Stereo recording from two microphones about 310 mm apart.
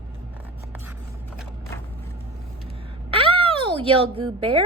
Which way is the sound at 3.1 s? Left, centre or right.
Centre.